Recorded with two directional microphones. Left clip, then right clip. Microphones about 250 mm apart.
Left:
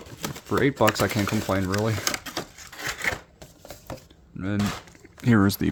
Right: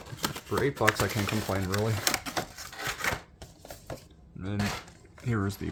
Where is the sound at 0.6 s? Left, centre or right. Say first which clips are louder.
Left 5 dB; left.